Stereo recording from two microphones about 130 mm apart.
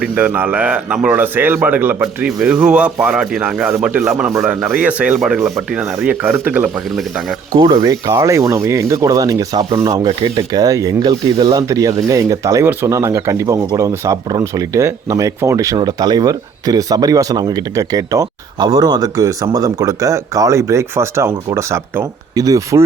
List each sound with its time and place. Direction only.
0.0 s speech: 10° right (ahead or behind)
7.5 s speech: 30° right (ahead or behind)